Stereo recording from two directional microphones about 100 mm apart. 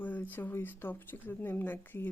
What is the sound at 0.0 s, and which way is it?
Speech, 15° left (ahead or behind).